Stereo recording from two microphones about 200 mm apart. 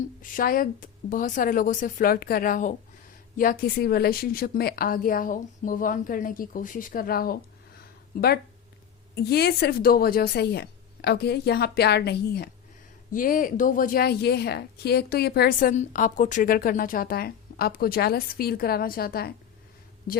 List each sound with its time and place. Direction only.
0.2 s a woman's voice: 45° left (ahead or behind)
9.1 s a woman's voice: 55° left (ahead or behind)
13.1 s a woman's voice: 45° left (ahead or behind)